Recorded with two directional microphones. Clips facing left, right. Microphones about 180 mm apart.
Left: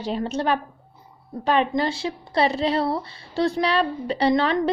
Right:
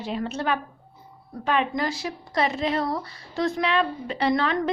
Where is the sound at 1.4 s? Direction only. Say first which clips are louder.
Left 3 dB; 35° left (ahead or behind).